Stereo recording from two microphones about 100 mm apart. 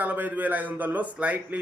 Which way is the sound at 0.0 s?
15° right (ahead or behind).